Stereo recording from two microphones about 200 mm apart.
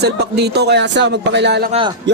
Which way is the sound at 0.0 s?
55° right (ahead or behind).